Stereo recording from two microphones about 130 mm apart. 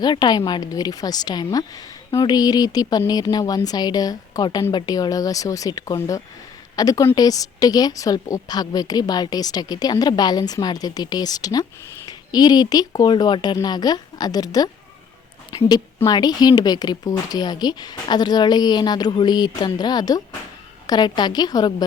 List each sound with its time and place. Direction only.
0.0 s a woman's voice: 35° left (ahead or behind)